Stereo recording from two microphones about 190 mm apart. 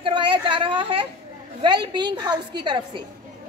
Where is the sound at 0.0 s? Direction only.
25° right (ahead or behind).